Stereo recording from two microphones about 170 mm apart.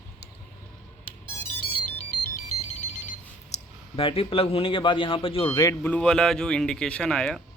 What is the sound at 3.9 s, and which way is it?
Speech, 35° left (ahead or behind).